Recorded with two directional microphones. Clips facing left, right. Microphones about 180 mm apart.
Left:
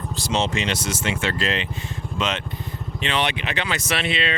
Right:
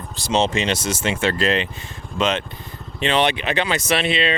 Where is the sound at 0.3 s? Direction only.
25° right (ahead or behind); by 1.6 s 45° right (ahead or behind).